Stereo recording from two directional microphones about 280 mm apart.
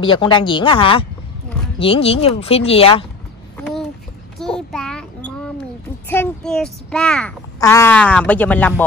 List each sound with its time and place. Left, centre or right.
0.0 s speech: centre
4.4 s child singing: centre
6.0 s a child's voice: centre